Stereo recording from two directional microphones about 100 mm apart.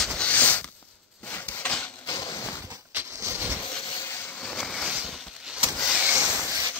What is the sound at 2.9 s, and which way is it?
Vehicle, 20° right (ahead or behind).